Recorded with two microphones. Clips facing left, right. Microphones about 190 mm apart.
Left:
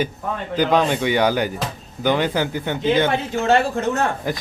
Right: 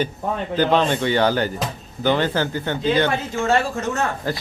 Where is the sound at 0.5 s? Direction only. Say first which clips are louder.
Left 1 dB; 10° left (ahead or behind).